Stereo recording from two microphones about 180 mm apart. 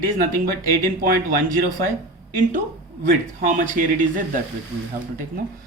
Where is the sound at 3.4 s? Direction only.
45° right (ahead or behind).